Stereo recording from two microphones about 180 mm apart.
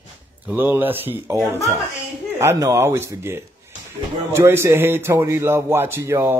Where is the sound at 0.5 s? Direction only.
10° right (ahead or behind).